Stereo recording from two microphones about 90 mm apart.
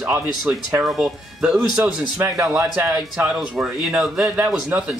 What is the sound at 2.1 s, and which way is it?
Speech, 30° right (ahead or behind).